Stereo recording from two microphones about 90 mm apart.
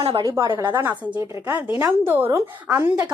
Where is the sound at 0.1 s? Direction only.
50° right (ahead or behind).